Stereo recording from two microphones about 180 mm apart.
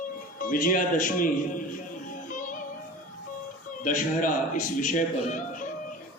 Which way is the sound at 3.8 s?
45° left (ahead or behind).